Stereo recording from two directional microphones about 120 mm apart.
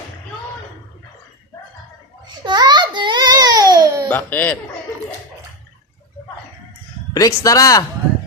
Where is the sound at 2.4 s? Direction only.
35° right (ahead or behind).